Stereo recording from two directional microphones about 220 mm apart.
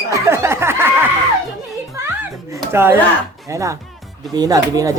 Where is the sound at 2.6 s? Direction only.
10° right (ahead or behind).